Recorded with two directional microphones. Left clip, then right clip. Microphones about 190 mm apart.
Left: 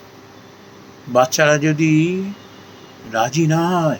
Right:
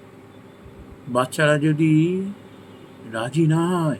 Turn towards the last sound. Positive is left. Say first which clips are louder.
# left 5 dB
turn(degrees=-20)  # may be behind; listen again after turning